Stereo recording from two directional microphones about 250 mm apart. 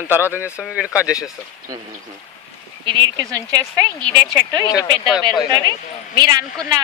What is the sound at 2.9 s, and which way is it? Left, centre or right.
A woman's voice, centre.